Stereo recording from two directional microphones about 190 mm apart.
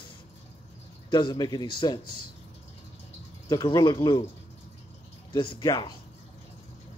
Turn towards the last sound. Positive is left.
turn(degrees=20)  # may be behind; listen again after turning